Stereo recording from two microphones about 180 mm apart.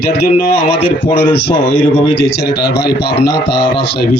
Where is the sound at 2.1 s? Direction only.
70° left (ahead or behind).